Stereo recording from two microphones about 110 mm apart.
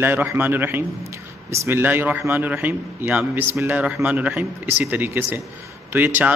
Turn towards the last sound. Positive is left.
turn(degrees=-15)  # may be behind; listen again after turning